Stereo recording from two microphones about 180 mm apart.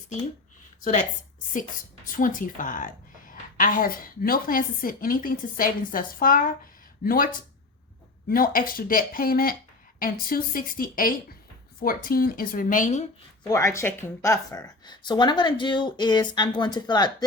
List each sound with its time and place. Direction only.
2.1 s a woman's voice: 50° left (ahead or behind)
13.5 s a woman's voice: 15° left (ahead or behind)